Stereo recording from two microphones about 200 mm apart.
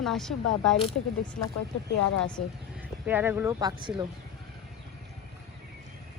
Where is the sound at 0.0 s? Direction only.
Centre (ahead or behind).